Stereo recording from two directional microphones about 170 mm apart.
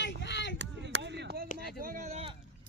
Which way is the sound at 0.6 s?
90° right.